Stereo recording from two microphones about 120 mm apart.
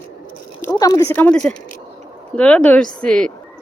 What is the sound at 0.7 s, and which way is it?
Speech, 30° left (ahead or behind).